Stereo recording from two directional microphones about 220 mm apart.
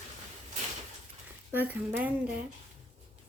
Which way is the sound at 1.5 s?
10° right (ahead or behind).